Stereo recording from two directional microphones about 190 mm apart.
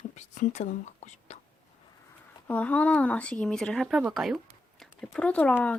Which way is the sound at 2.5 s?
5° left (ahead or behind).